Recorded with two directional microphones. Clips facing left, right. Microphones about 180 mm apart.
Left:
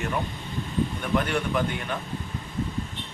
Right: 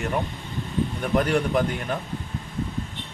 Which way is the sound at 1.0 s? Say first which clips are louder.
Right 6 dB; 40° right (ahead or behind).